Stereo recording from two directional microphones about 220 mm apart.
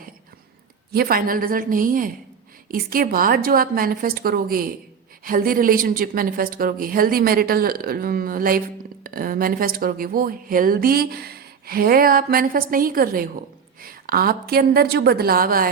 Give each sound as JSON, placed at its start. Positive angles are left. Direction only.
{"t": 0.9, "sound": "a woman's voice", "side_deg": -40}